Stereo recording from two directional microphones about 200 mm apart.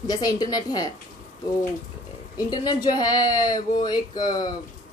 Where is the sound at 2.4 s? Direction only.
20° left (ahead or behind).